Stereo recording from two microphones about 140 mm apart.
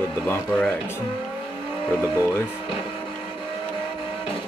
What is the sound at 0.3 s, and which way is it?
Speech, 10° left (ahead or behind).